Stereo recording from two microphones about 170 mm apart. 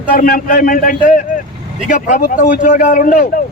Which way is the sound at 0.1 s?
55° left (ahead or behind).